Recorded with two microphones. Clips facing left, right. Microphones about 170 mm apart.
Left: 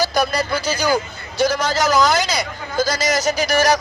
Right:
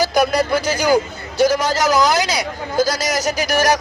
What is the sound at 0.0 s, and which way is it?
A man's voice, 15° right (ahead or behind).